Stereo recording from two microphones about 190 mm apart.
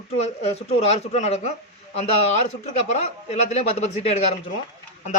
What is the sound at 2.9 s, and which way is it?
Speech, 35° left (ahead or behind).